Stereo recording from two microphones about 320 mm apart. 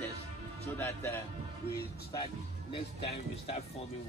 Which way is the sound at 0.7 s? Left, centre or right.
Centre.